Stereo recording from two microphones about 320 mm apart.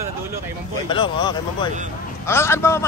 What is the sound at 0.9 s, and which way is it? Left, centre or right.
Speech, centre.